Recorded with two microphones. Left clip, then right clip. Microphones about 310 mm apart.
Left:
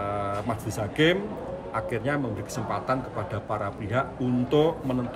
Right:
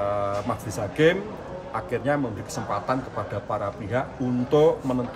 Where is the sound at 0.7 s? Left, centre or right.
Centre.